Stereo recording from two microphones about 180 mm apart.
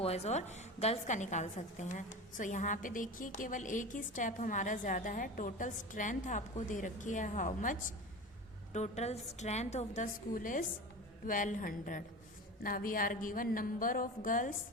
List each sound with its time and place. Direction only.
0.0 s a woman's voice: 35° left (ahead or behind)